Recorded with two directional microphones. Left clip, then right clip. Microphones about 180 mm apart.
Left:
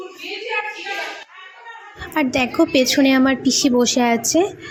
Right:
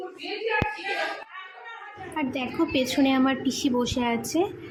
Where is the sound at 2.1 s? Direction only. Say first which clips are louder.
Left 10 dB; 35° left (ahead or behind).